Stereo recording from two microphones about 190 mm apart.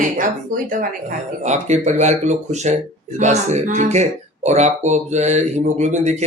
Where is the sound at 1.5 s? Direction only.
35° right (ahead or behind).